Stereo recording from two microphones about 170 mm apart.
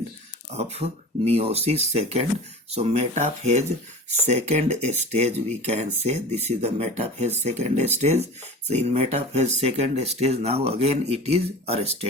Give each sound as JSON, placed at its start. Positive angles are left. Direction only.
{"t": 0.5, "sound": "speech", "side_deg": -40}